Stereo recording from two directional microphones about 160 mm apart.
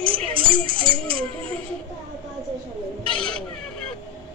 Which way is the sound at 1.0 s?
10° left (ahead or behind).